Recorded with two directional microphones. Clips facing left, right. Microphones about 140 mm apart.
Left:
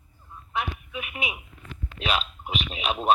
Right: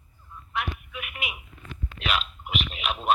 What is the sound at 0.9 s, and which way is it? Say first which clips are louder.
Telephone: left 4 dB; 25° left (ahead or behind).